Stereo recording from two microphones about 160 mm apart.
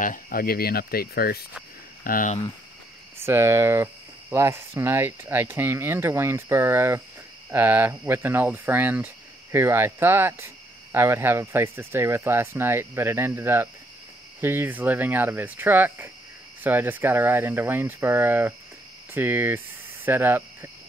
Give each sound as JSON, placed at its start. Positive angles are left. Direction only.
{"t": 0.0, "sound": "speech", "side_deg": 60}
{"t": 2.0, "sound": "speech", "side_deg": 60}
{"t": 3.2, "sound": "speech", "side_deg": -15}
{"t": 20.1, "sound": "cricket", "side_deg": -10}